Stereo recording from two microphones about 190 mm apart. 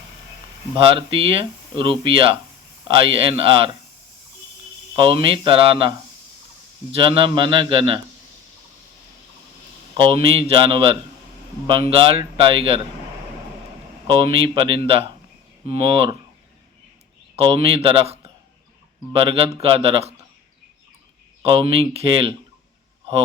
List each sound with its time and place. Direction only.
0.9 s speech: 30° right (ahead or behind)
4.9 s speech: 25° right (ahead or behind)
6.9 s speech: 30° right (ahead or behind)
10.0 s speech: 30° right (ahead or behind)
14.1 s speech: 30° right (ahead or behind)
17.3 s speech: 30° right (ahead or behind)
21.4 s speech: 30° right (ahead or behind)